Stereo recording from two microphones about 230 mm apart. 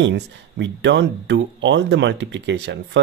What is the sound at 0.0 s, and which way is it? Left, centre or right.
Speech, right.